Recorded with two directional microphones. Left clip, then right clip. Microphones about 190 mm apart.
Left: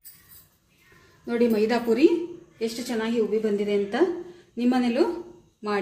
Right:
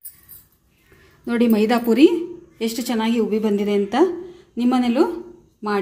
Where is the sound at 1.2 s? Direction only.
55° right (ahead or behind).